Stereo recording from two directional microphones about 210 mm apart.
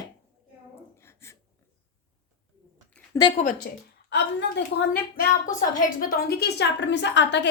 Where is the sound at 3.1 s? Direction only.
15° left (ahead or behind).